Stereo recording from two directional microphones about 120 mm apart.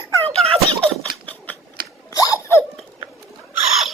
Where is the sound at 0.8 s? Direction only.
10° left (ahead or behind).